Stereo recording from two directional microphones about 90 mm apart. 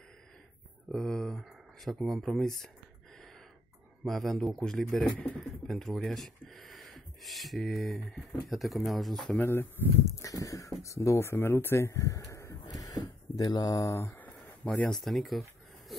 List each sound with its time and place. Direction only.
0.9 s speech: 5° left (ahead or behind)
4.0 s speech: centre (ahead or behind)
9.4 s speech: 25° left (ahead or behind)
10.1 s speech: 40° left (ahead or behind)
12.3 s a sound: 35° left (ahead or behind)
14.0 s a sound: 20° left (ahead or behind)
14.9 s speech: 5° left (ahead or behind)